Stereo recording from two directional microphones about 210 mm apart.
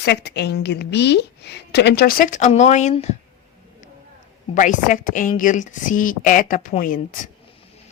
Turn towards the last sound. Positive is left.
turn(degrees=40)  # may be behind; listen again after turning